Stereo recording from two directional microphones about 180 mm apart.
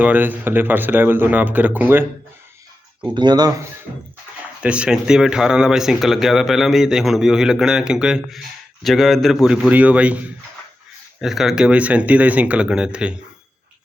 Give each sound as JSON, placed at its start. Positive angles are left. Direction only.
{"t": 0.0, "sound": "speech", "side_deg": -10}
{"t": 3.2, "sound": "speech", "side_deg": -25}
{"t": 4.6, "sound": "speech", "side_deg": -5}